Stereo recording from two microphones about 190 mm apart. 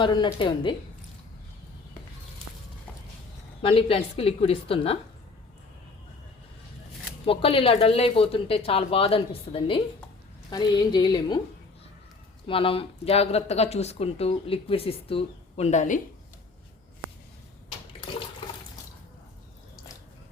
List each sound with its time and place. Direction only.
0.0 s a woman's voice: 25° left (ahead or behind)
3.6 s a woman's voice: 30° left (ahead or behind)
7.3 s a woman's voice: 30° left (ahead or behind)
12.5 s speech: 30° left (ahead or behind)